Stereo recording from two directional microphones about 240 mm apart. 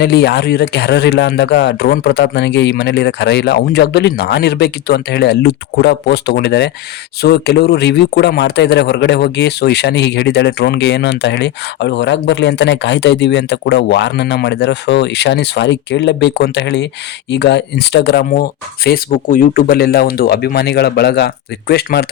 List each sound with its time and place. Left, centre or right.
0.0 s speech: left